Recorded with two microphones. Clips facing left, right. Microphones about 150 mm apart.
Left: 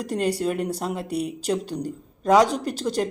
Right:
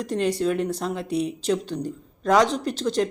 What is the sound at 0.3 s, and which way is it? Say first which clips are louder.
A woman's voice: right 2 dB; 10° left (ahead or behind).